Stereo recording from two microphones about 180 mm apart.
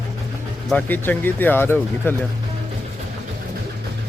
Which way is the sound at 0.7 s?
5° left (ahead or behind).